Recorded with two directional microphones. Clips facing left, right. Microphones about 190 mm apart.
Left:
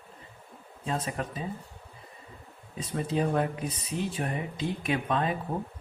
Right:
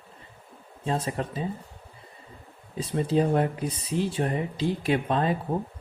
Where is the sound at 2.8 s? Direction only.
30° right (ahead or behind).